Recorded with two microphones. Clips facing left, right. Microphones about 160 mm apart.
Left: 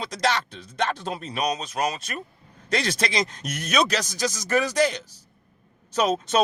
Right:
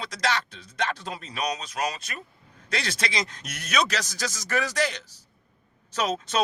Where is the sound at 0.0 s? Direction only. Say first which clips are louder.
Left 3 dB; 20° left (ahead or behind).